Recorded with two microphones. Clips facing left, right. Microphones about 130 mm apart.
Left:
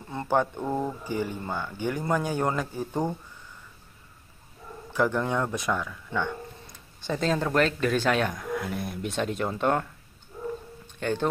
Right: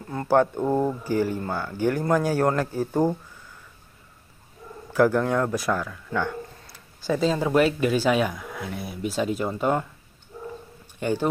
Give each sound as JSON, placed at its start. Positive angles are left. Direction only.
{"t": 0.1, "sound": "speech", "side_deg": 0}
{"t": 0.6, "sound": "speech", "side_deg": -15}
{"t": 1.0, "sound": "speech", "side_deg": 15}
{"t": 1.5, "sound": "speech", "side_deg": -10}
{"t": 2.0, "sound": "speech", "side_deg": 5}
{"t": 4.9, "sound": "speech", "side_deg": -5}
{"t": 11.0, "sound": "speech", "side_deg": -10}